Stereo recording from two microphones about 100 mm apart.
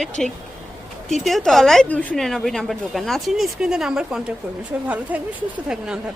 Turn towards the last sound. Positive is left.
turn(degrees=-10)  # may be behind; listen again after turning